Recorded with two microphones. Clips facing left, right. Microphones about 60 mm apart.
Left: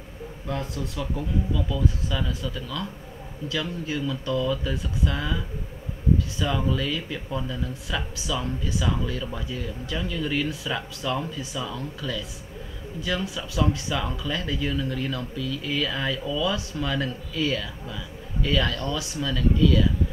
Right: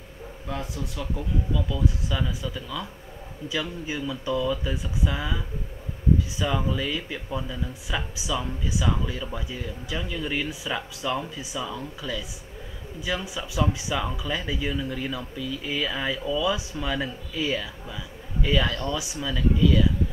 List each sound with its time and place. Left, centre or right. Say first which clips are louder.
0.5 s speech: left 2 dB; centre